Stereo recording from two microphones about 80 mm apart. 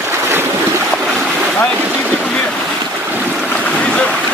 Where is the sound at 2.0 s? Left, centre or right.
Centre.